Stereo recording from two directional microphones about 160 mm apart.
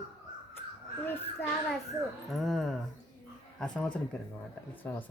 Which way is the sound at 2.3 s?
Centre (ahead or behind).